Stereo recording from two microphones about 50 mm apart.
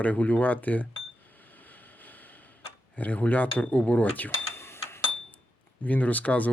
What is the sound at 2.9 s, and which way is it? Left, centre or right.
Speech, left.